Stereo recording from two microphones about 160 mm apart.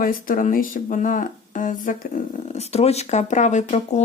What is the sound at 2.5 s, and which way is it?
Speech, 40° left (ahead or behind).